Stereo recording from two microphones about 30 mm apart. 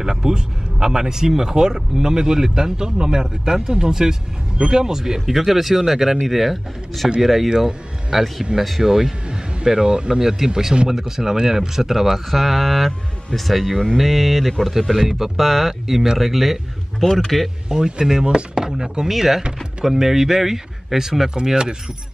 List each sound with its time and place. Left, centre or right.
0.0 s speech: centre
5.2 s speech: centre
7.4 s speech: centre
10.2 s speech: centre
12.3 s speech: centre
15.3 s speech: centre
17.0 s speech: centre
17.6 s speech: right
19.0 s speech: centre